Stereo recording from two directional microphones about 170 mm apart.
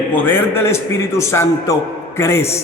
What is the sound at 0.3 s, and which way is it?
A man's voice, 15° left (ahead or behind).